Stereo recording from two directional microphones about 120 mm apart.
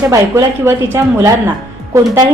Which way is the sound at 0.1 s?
25° right (ahead or behind).